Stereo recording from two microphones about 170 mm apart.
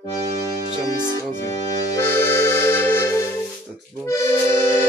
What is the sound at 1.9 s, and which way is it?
Accordion, 15° left (ahead or behind).